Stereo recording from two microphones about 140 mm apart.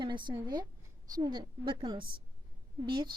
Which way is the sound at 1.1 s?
30° right (ahead or behind).